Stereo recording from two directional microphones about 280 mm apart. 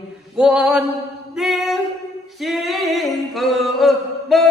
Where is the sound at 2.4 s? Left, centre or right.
Centre.